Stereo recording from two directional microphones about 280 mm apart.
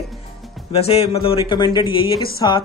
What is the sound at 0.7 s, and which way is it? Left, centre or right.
Speech, left.